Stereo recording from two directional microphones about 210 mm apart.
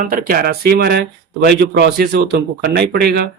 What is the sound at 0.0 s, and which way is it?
Speech, 40° right (ahead or behind).